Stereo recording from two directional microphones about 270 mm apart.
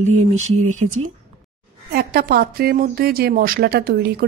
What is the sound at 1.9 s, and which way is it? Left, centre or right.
A woman's voice, right.